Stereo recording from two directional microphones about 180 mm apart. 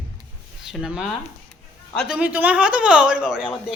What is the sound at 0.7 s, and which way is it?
A man's voice, 5° right (ahead or behind).